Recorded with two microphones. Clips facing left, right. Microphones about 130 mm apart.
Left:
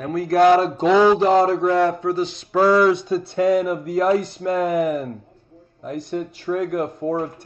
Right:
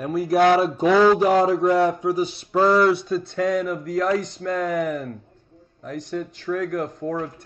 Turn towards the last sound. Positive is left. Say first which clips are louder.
# left 3 dB
turn(degrees=5)  # may be behind; listen again after turning